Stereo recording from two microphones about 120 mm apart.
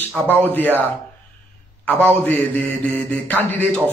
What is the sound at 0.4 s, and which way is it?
Speech, 15° left (ahead or behind).